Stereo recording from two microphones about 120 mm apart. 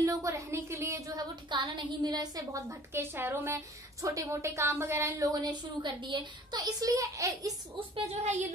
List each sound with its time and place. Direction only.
0.0 s a woman's voice: 25° right (ahead or behind)
6.6 s a woman's voice: 30° right (ahead or behind)